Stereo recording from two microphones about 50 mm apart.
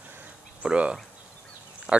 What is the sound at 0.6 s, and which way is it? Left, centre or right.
Speech, right.